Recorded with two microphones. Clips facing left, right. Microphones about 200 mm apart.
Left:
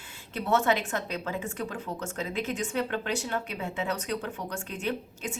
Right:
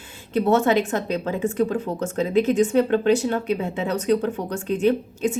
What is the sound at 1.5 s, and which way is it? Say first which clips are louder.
A woman's voice: right 12 dB; 30° right (ahead or behind).